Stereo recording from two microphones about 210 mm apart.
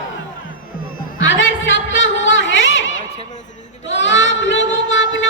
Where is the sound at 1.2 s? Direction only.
65° left (ahead or behind).